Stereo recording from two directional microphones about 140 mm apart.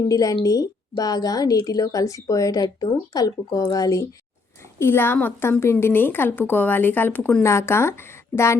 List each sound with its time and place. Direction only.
0.1 s a woman's voice: 25° left (ahead or behind)